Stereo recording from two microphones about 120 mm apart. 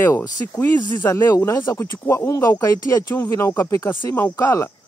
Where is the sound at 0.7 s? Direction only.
40° left (ahead or behind).